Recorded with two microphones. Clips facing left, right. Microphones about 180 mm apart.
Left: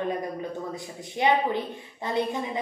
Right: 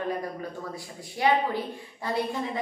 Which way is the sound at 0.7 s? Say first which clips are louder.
Left 3 dB; 20° left (ahead or behind).